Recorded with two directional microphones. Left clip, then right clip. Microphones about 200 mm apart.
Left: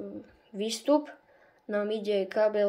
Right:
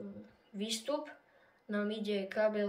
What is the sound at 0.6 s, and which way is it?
Speech, 20° left (ahead or behind).